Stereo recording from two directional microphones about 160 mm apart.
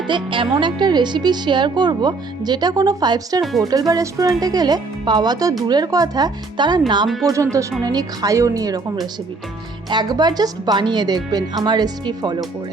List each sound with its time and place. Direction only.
0.1 s speech: 30° right (ahead or behind)